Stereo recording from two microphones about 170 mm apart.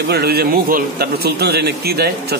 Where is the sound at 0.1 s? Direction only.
70° right (ahead or behind).